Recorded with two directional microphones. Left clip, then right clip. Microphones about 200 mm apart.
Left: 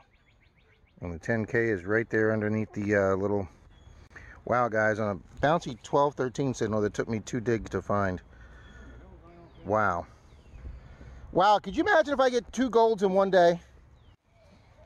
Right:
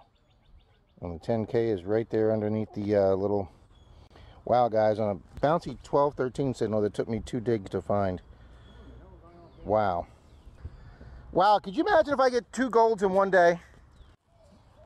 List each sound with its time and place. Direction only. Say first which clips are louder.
1.1 s speech: even; 5° left (ahead or behind)
9.7 s speech: right 1 dB; centre (ahead or behind)
11.3 s speech: even; 5° left (ahead or behind)